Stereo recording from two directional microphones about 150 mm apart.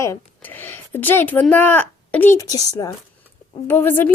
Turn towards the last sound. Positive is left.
turn(degrees=15)  # may be behind; listen again after turning